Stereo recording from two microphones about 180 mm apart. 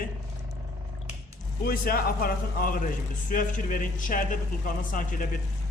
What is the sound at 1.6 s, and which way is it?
A man's voice, 55° left (ahead or behind).